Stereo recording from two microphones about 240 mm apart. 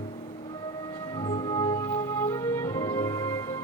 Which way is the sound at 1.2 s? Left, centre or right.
Centre.